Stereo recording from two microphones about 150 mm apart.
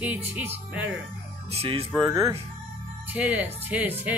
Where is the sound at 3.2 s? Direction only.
10° right (ahead or behind).